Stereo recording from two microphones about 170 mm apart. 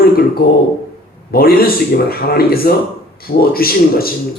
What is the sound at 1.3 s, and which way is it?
Speech, 60° left (ahead or behind).